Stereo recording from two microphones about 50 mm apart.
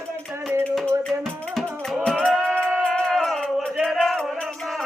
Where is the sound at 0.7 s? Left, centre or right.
Centre.